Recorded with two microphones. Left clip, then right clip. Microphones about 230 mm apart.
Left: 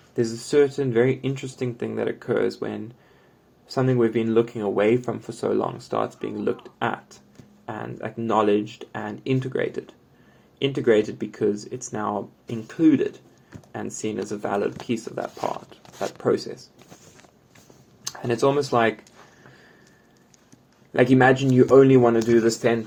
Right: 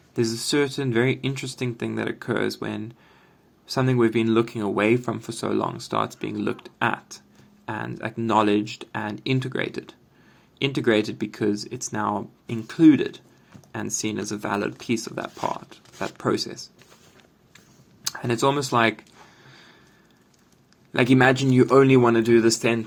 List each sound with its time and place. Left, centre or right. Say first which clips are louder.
0.2 s speech: left 3 dB; right
18.0 s speech: left 1 dB; right
20.9 s speech: left 1 dB; right